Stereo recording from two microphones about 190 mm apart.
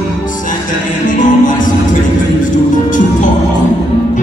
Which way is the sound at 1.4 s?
45° left (ahead or behind).